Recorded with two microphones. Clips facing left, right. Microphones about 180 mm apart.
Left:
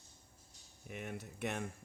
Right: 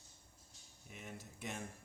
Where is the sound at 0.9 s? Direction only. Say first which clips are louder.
Left 7 dB; 65° left (ahead or behind).